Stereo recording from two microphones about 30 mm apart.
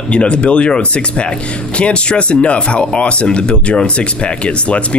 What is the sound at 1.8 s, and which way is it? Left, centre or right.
Speech, left.